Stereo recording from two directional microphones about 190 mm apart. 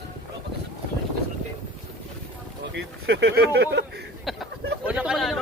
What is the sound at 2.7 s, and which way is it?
Speech, 65° right (ahead or behind).